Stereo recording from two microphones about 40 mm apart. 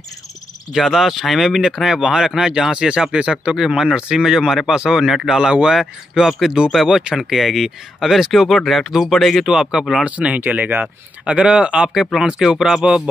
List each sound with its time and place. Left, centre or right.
0.7 s speech: centre; by 3.5 s right
3.5 s speech: centre
5.1 s speech: centre
5.4 s speech: centre
5.8 s speech: centre
9.4 s speech: centre
10.0 s speech: right
11.2 s speech: right
12.2 s speech: centre